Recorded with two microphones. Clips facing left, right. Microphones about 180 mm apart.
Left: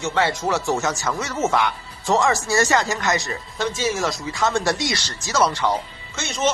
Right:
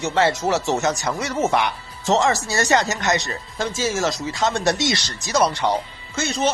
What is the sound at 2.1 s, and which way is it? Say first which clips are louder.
Speech: even; 25° right (ahead or behind).